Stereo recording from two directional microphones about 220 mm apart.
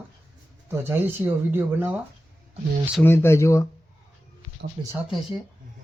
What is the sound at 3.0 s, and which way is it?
Speech, 10° left (ahead or behind).